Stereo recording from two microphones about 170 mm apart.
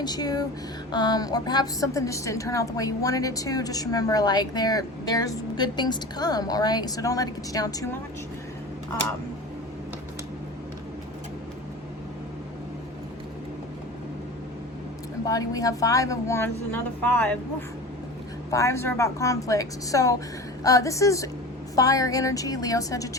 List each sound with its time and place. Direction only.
0.0 s a woman's voice: 25° left (ahead or behind)
15.3 s a woman's voice: 20° left (ahead or behind)
18.5 s a woman's voice: 15° left (ahead or behind)